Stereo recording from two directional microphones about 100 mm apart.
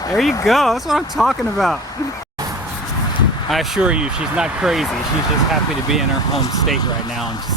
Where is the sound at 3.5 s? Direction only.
5° right (ahead or behind).